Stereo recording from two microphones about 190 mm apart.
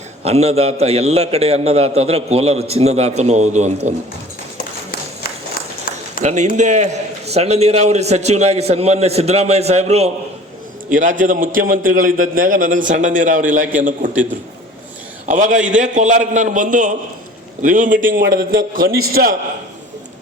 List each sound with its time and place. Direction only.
0.3 s a man's voice: 35° right (ahead or behind)
4.5 s a sound: 50° left (ahead or behind)
6.2 s a man's voice: 40° right (ahead or behind)
15.3 s a man's voice: 40° right (ahead or behind)